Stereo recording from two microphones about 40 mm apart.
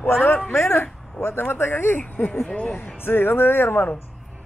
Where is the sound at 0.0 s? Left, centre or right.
Left.